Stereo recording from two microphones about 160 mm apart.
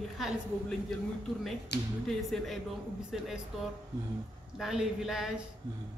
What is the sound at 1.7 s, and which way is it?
Speech, 90° left.